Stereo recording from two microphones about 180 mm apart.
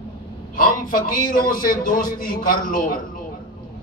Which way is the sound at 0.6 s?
50° left (ahead or behind).